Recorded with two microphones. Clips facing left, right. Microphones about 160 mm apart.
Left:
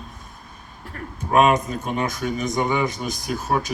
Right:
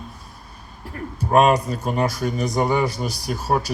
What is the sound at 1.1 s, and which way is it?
Speech, 35° right (ahead or behind).